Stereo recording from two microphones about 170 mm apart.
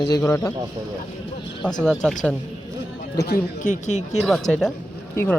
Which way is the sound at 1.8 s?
5° left (ahead or behind).